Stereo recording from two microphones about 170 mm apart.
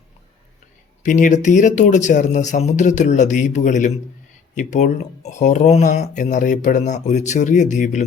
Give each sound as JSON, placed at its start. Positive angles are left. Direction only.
{"t": 1.0, "sound": "speech", "side_deg": 50}